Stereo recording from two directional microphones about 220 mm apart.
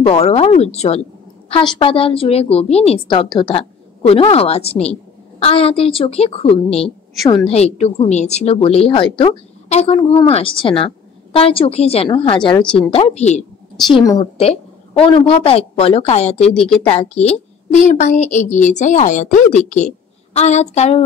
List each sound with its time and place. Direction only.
0.0 s a woman's voice: 25° left (ahead or behind)